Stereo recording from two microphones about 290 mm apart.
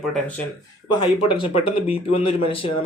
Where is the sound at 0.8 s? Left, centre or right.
Centre.